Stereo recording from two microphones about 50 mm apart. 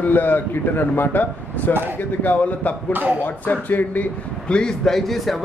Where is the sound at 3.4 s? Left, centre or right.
Left.